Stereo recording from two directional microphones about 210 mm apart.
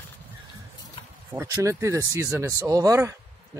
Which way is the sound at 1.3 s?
15° right (ahead or behind).